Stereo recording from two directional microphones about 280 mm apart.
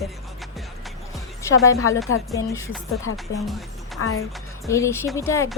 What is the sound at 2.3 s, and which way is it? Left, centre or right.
Speech, centre.